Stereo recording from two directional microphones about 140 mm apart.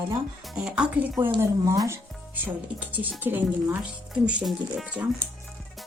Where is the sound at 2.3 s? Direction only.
10° right (ahead or behind).